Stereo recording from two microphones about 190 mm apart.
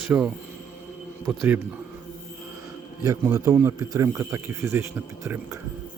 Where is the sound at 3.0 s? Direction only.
15° right (ahead or behind).